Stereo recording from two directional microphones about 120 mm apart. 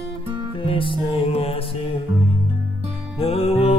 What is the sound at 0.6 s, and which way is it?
Music, 50° left (ahead or behind).